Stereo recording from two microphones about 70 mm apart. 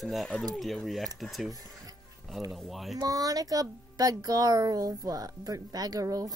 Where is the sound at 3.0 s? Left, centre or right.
Right.